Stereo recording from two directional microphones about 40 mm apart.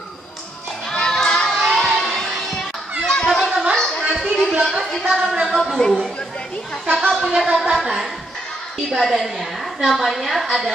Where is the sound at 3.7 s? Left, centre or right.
Centre.